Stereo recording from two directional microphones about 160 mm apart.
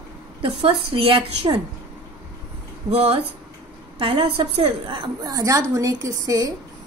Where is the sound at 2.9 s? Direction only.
35° right (ahead or behind).